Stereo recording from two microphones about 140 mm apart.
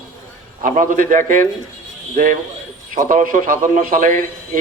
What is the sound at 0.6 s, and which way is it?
A man's voice, 75° right (ahead or behind).